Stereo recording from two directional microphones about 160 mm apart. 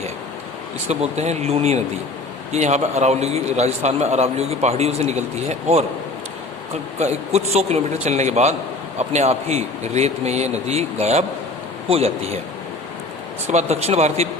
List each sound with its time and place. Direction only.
0.9 s a man's voice: 45° right (ahead or behind)
7.0 s a man's voice: 45° right (ahead or behind)
13.5 s a man's voice: 45° right (ahead or behind)